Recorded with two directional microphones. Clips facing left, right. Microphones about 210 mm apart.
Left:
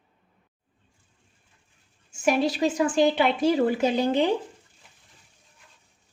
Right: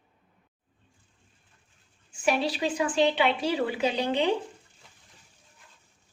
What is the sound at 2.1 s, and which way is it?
A woman's voice, 45° left (ahead or behind).